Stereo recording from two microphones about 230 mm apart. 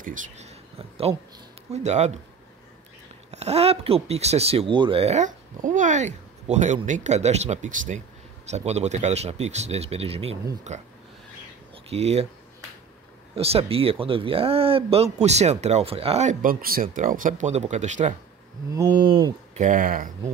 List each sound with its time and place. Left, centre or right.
0.0 s speech: right
3.3 s speech: right
13.3 s speech: right
18.7 s speech: centre; by 20.1 s right